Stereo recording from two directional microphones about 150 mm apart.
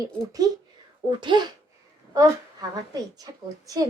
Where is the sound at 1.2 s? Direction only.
30° right (ahead or behind).